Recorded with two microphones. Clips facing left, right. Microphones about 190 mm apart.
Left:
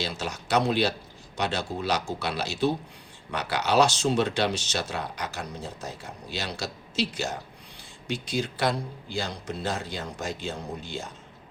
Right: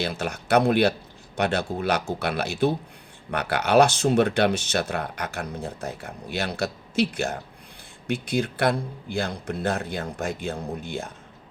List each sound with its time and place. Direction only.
0.0 s speech: 55° right (ahead or behind)